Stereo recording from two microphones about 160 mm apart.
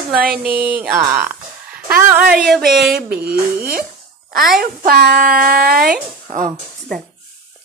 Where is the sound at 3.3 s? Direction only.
70° right (ahead or behind).